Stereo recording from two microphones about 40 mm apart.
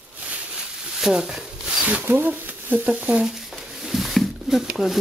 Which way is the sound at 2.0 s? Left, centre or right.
Right.